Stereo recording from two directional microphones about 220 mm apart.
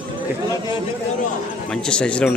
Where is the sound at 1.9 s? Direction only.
5° left (ahead or behind).